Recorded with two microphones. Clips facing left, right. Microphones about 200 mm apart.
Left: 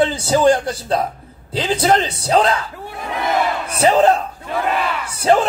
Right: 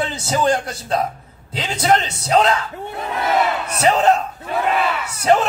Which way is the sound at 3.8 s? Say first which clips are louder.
Left 3 dB; 30° left (ahead or behind).